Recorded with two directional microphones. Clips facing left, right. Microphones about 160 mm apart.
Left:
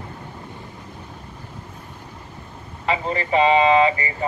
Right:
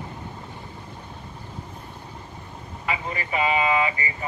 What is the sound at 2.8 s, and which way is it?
Speech, 30° left (ahead or behind).